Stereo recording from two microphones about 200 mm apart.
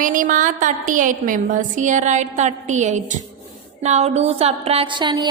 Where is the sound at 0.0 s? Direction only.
40° right (ahead or behind).